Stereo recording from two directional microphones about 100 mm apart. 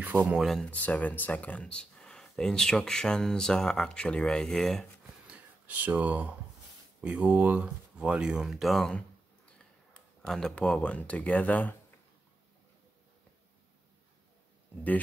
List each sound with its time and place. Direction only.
0.0 s speech: 15° right (ahead or behind)
0.7 s speech: 15° left (ahead or behind)
5.2 s a sound: 15° right (ahead or behind)
7.0 s speech: 15° right (ahead or behind); by 8.9 s centre (ahead or behind)
10.2 s speech: 5° left (ahead or behind)